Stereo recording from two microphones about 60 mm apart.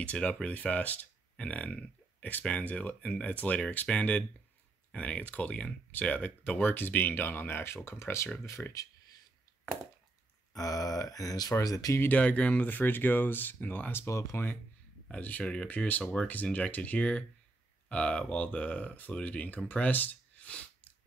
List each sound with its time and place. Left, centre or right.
0.0 s speech: left
8.6 s speech: left
10.5 s speech: left
12.1 s speech: left
14.0 s speech: left
15.0 s speech: left